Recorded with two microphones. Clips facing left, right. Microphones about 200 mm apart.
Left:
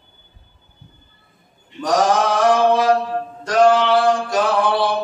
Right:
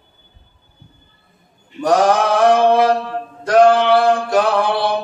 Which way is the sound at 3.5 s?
60° right (ahead or behind).